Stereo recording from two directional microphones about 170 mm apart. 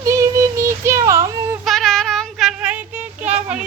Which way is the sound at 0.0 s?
20° right (ahead or behind).